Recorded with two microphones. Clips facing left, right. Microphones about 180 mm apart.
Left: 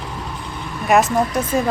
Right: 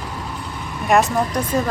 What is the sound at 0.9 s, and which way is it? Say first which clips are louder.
Speech: left 1 dB; centre (ahead or behind).